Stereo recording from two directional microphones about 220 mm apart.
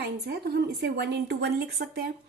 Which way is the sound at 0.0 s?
45° right (ahead or behind).